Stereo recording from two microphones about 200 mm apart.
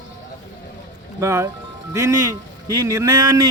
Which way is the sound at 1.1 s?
15° right (ahead or behind).